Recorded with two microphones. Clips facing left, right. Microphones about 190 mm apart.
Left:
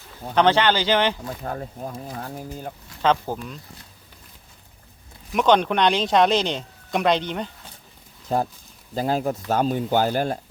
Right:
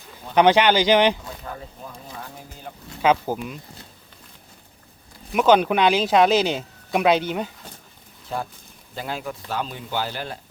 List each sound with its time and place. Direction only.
0.3 s speech: 15° right (ahead or behind)
1.5 s speech: 45° left (ahead or behind)
3.0 s speech: 10° right (ahead or behind)
5.3 s speech: 5° right (ahead or behind)
8.3 s speech: 40° left (ahead or behind)